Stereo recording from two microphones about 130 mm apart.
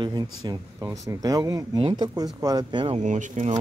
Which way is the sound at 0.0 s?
35° right (ahead or behind).